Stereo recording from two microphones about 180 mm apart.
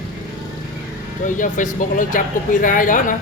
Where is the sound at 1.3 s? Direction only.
45° left (ahead or behind).